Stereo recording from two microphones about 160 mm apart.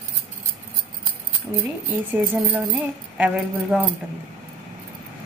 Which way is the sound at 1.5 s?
15° right (ahead or behind).